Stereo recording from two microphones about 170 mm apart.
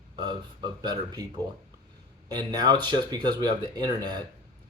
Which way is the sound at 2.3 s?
25° right (ahead or behind).